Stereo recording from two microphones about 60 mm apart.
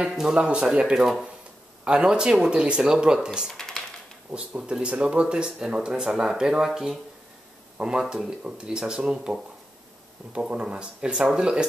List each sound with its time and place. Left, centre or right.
0.1 s speech: centre
1.0 s speech: centre
3.5 s a sound: centre
4.3 s speech: centre
10.5 s speech: centre